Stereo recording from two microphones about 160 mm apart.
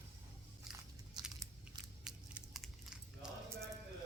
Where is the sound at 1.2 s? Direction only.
25° right (ahead or behind).